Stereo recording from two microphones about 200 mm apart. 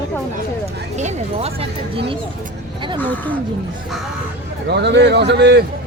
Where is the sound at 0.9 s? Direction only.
30° right (ahead or behind).